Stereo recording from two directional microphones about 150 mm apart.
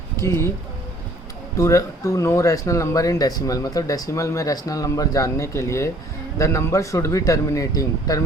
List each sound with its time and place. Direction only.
0.2 s speech: 20° left (ahead or behind)
1.5 s speech: 20° left (ahead or behind)